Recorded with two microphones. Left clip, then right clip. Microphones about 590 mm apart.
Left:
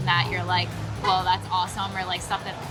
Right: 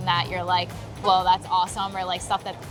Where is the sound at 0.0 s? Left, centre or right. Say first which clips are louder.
Even; right.